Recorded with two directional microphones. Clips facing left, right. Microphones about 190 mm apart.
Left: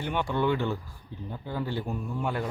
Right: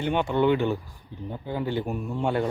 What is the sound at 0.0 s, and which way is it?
A man's voice, 25° right (ahead or behind).